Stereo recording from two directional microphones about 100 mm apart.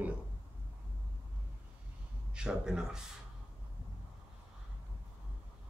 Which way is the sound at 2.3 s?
10° right (ahead or behind).